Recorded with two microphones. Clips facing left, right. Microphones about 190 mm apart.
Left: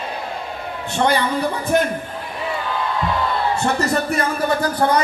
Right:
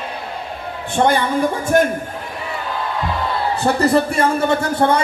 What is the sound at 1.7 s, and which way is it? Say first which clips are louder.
Speech: right 4 dB; 50° right (ahead or behind).